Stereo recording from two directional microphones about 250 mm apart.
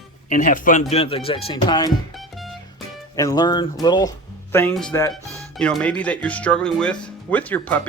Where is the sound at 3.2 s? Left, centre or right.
Centre.